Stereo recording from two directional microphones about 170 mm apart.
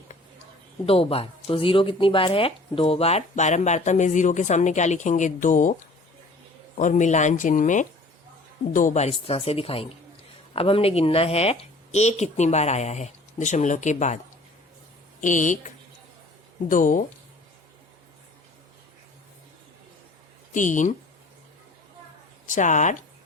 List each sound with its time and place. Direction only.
0.9 s speech: 35° left (ahead or behind)
6.7 s a woman's voice: 45° left (ahead or behind)
15.2 s speech: 50° left (ahead or behind)
20.5 s speech: 50° left (ahead or behind)
22.4 s speech: 45° left (ahead or behind)